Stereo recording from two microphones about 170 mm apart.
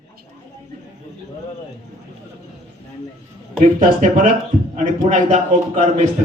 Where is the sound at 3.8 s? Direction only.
55° right (ahead or behind).